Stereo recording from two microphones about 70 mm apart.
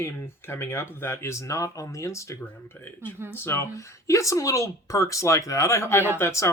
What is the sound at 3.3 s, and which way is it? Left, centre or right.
Speech, left.